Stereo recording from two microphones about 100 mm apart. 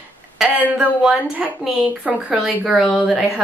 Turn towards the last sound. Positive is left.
turn(degrees=-5)  # may be behind; listen again after turning